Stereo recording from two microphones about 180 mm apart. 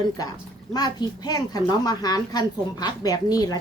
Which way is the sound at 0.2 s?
20° left (ahead or behind).